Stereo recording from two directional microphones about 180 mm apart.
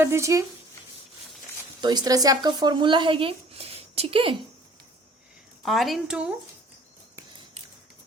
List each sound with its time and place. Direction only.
0.0 s speech: 15° right (ahead or behind)
1.8 s speech: 25° right (ahead or behind)
5.6 s a woman's voice: centre (ahead or behind)